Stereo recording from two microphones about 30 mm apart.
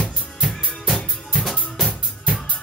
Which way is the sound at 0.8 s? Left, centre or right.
Centre.